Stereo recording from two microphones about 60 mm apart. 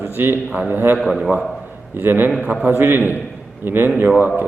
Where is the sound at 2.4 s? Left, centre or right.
Centre.